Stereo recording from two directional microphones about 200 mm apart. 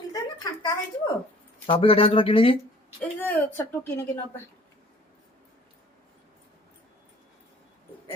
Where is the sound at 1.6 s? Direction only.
25° left (ahead or behind).